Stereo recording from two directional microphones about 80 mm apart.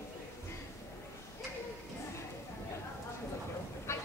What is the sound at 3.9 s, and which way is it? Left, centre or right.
Train, left.